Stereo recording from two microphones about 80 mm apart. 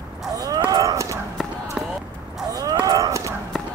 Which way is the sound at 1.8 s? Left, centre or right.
Centre.